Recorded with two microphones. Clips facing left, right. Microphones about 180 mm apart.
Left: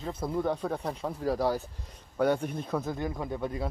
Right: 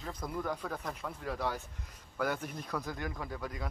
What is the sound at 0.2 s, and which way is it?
Speech, 30° left (ahead or behind).